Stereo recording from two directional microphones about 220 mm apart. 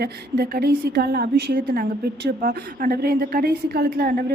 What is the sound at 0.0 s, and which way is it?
A woman's voice, 45° right (ahead or behind).